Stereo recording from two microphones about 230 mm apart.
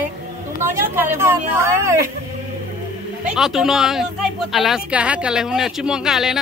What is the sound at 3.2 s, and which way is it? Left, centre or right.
Speech, centre.